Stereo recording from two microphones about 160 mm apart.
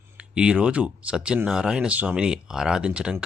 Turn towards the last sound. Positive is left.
turn(degrees=-5)  # may be behind; listen again after turning